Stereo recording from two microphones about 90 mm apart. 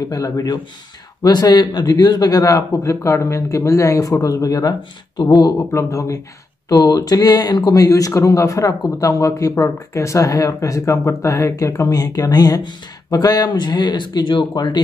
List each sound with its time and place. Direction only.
0.1 s a man's voice: 40° left (ahead or behind)
5.7 s a man's voice: 35° left (ahead or behind); by 14.8 s 55° left (ahead or behind)